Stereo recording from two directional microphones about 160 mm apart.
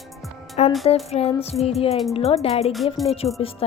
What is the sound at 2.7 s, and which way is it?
Music, centre (ahead or behind).